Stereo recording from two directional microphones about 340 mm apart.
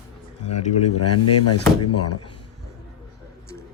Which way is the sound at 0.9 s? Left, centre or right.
Left.